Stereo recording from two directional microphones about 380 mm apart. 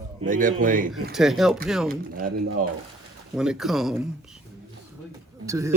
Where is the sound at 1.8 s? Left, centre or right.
Right.